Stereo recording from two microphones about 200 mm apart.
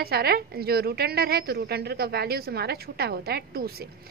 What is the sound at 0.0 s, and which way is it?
A woman's voice, 50° right (ahead or behind).